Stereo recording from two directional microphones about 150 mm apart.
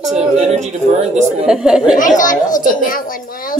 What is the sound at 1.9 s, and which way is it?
Speech, 60° left (ahead or behind).